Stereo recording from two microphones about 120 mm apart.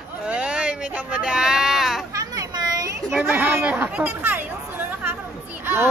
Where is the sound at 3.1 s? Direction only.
15° right (ahead or behind).